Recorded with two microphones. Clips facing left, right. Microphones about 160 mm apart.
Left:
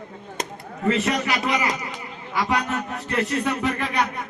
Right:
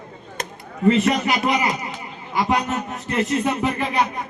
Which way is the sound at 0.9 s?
25° right (ahead or behind).